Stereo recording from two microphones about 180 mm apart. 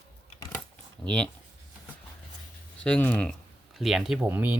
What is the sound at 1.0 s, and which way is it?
Speech, 5° left (ahead or behind).